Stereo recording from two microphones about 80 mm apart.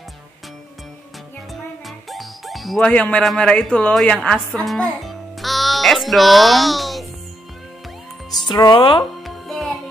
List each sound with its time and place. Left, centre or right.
1.5 s music: centre
2.8 s speech: centre
4.7 s music: centre
8.4 s speech: left
9.2 s music: centre